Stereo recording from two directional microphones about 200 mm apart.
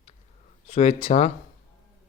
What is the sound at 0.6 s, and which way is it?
Speech, 35° left (ahead or behind).